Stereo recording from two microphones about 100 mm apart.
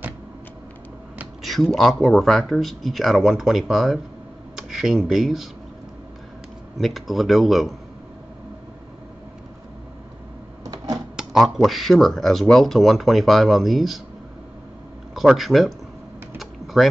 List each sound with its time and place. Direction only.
1.4 s speech: centre (ahead or behind)
6.8 s speech: centre (ahead or behind)
10.6 s a sound: 40° right (ahead or behind)
11.1 s speech: centre (ahead or behind)
15.1 s speech: centre (ahead or behind)
16.3 s typing: centre (ahead or behind)